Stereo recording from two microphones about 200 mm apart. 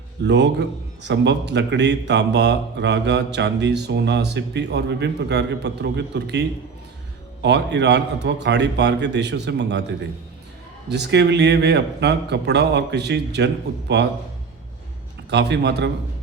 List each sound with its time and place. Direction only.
0.2 s a man's voice: 60° right (ahead or behind)
7.4 s a man's voice: 60° right (ahead or behind)
15.3 s a man's voice: 60° right (ahead or behind)